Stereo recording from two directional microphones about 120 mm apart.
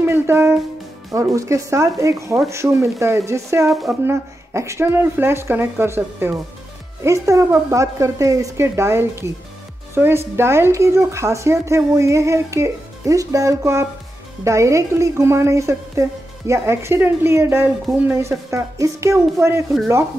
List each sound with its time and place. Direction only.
0.0 s music: 20° right (ahead or behind)
1.1 s speech: 25° right (ahead or behind)
3.6 s a woman's voice: centre (ahead or behind)
4.0 s speech: 25° right (ahead or behind)
18.5 s speech: 25° right (ahead or behind)